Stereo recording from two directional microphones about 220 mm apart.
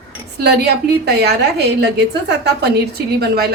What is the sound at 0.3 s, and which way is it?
A woman's voice, 45° right (ahead or behind).